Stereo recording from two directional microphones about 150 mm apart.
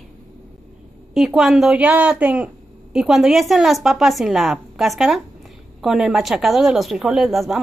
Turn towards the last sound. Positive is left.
turn(degrees=0)  # may be behind; listen again after turning